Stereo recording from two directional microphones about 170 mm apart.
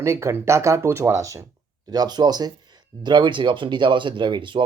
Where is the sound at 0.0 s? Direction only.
15° right (ahead or behind).